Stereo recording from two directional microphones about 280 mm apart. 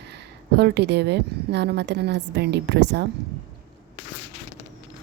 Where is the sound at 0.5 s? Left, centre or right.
Right.